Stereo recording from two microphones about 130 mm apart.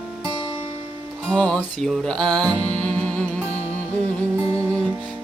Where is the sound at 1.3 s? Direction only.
5° left (ahead or behind).